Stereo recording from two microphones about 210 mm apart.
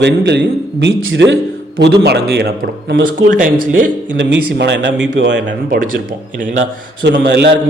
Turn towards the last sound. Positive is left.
turn(degrees=-55)  # may be behind; listen again after turning